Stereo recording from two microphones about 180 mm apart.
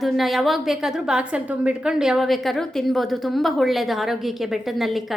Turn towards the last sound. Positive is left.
turn(degrees=0)  # may be behind; listen again after turning